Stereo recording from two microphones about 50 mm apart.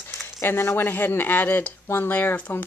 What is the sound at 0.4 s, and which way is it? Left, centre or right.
Speech, left.